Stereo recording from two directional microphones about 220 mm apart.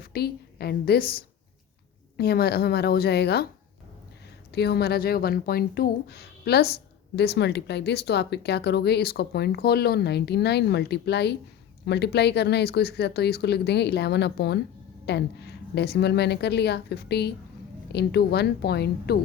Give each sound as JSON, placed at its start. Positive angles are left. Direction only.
{"t": 0.0, "sound": "a woman's voice", "side_deg": 45}
{"t": 4.5, "sound": "speech", "side_deg": 50}